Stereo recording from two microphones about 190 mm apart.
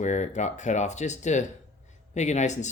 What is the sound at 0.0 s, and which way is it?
Speech, 40° left (ahead or behind).